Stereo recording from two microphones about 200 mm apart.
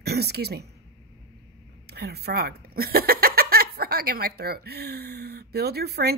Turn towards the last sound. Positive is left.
turn(degrees=-50)  # may be behind; listen again after turning